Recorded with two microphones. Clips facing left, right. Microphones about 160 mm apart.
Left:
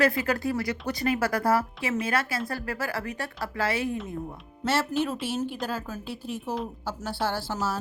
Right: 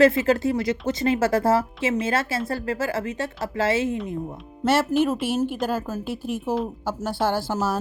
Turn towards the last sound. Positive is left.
turn(degrees=-50)  # may be behind; listen again after turning